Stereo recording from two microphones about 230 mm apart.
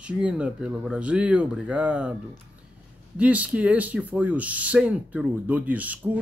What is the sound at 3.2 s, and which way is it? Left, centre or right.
Speech, centre.